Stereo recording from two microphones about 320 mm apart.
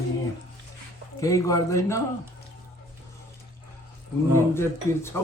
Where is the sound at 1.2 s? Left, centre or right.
Centre.